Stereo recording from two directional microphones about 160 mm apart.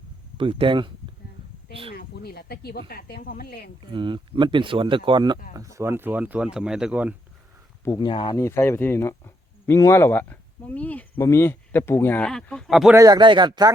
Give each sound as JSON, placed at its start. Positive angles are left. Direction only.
{"t": 0.3, "sound": "speech", "side_deg": -35}
{"t": 2.0, "sound": "speech", "side_deg": 75}
{"t": 3.9, "sound": "speech", "side_deg": -30}
{"t": 5.5, "sound": "speech", "side_deg": -20}
{"t": 7.9, "sound": "speech", "side_deg": 30}
{"t": 8.4, "sound": "speech", "side_deg": 15}
{"t": 12.9, "sound": "speech", "side_deg": -20}